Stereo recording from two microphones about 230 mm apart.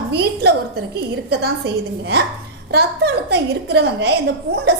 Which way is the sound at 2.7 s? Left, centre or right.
Right.